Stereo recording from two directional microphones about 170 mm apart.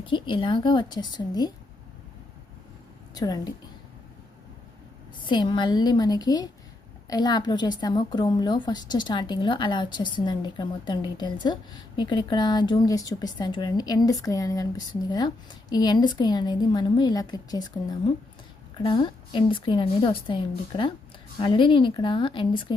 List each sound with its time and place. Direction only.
0.1 s a woman's voice: 30° left (ahead or behind)
3.2 s a woman's voice: 20° left (ahead or behind)
5.2 s a woman's voice: 25° left (ahead or behind)